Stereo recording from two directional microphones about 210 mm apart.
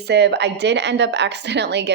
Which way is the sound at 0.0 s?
55° right (ahead or behind).